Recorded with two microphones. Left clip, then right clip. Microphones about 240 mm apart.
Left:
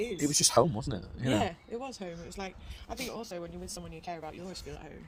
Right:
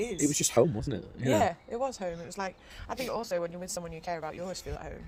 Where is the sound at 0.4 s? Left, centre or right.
Centre.